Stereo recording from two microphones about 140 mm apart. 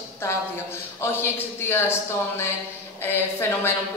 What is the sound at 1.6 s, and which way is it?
A woman's voice, 15° left (ahead or behind).